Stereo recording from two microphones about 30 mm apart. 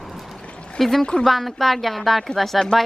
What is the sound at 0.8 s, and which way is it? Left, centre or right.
A woman's voice, centre.